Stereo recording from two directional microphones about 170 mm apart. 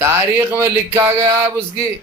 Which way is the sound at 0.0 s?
15° right (ahead or behind).